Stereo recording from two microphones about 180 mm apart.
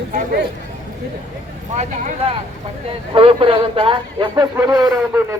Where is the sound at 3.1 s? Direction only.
30° right (ahead or behind).